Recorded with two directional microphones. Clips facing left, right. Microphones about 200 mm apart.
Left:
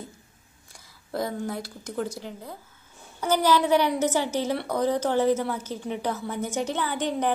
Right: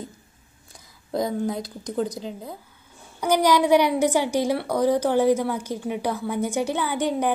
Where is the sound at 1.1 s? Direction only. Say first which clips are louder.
Right 4 dB; 15° right (ahead or behind).